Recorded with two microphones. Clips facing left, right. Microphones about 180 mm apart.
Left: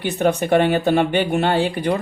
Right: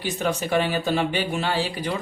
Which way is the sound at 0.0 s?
60° left (ahead or behind).